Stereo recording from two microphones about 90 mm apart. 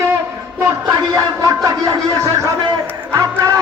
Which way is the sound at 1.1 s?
40° right (ahead or behind).